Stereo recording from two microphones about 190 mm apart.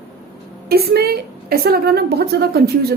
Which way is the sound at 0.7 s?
55° right (ahead or behind).